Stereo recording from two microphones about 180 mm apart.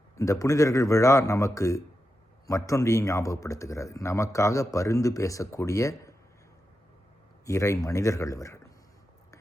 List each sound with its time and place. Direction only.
0.2 s speech: 20° left (ahead or behind)
7.4 s speech: 15° left (ahead or behind)